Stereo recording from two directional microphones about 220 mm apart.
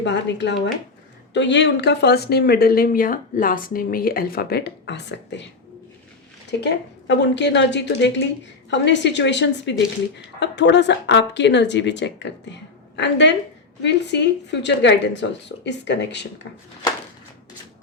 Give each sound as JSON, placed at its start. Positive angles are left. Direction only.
{"t": 0.0, "sound": "speech", "side_deg": 55}
{"t": 6.5, "sound": "speech", "side_deg": 50}